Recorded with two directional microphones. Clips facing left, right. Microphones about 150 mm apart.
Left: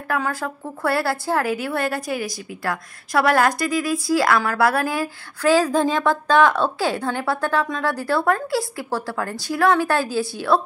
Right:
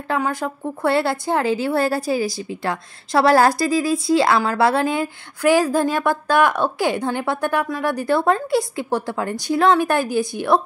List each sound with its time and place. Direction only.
0.1 s a woman's voice: 20° right (ahead or behind)